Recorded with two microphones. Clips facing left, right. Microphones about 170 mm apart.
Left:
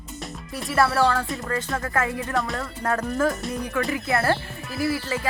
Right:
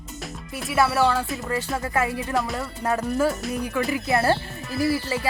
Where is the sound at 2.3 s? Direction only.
Centre (ahead or behind).